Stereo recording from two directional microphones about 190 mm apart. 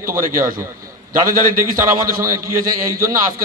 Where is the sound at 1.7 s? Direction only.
45° right (ahead or behind).